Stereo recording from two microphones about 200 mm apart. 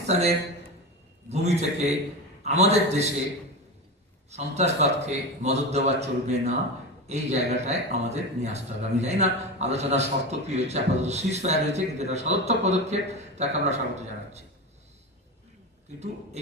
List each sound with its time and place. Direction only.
0.1 s a man's voice: 35° right (ahead or behind)
4.3 s a man's voice: 35° right (ahead or behind)